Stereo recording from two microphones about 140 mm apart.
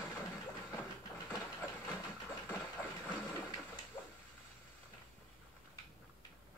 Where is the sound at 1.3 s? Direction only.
25° left (ahead or behind).